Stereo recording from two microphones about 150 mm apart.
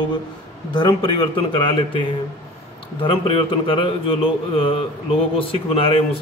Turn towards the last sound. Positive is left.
turn(degrees=40)  # may be behind; listen again after turning